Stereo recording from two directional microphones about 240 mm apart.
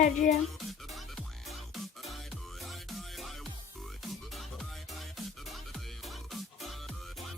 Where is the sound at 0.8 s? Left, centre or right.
Centre.